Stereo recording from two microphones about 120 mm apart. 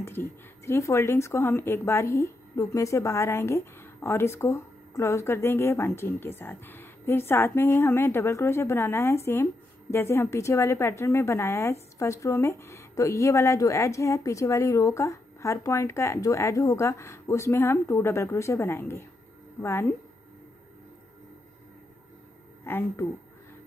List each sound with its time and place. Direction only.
0.0 s speech: 20° left (ahead or behind)
22.7 s a woman's voice: 20° left (ahead or behind)